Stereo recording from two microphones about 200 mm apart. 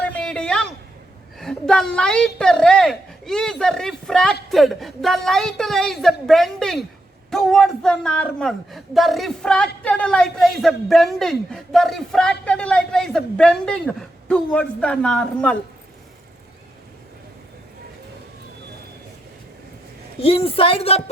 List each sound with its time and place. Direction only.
0.0 s a sound: 5° left (ahead or behind)
1.4 s speech: 5° left (ahead or behind)
20.2 s speech: 30° left (ahead or behind)